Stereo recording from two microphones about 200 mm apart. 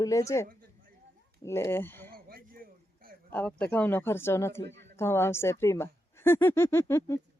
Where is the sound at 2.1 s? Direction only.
45° right (ahead or behind).